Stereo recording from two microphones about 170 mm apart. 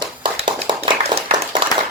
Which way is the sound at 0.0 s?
30° right (ahead or behind).